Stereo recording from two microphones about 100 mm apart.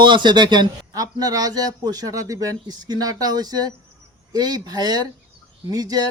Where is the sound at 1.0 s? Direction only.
40° right (ahead or behind).